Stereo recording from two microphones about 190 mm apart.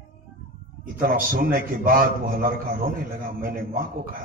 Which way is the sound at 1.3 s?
50° right (ahead or behind).